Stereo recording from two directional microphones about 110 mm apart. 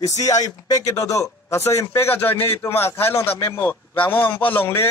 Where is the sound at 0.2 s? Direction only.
35° left (ahead or behind).